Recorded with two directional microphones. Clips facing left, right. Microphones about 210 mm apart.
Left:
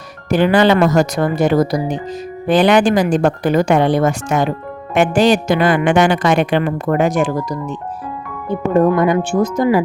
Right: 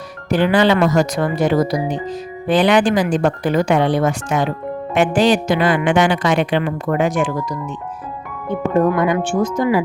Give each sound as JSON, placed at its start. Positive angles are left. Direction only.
{"t": 0.3, "sound": "a woman's voice", "side_deg": 50}
{"t": 9.0, "sound": "speech", "side_deg": 40}